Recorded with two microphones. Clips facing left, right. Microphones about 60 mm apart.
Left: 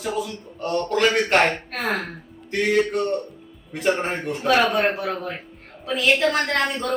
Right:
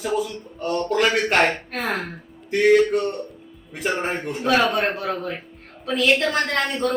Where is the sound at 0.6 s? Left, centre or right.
Centre.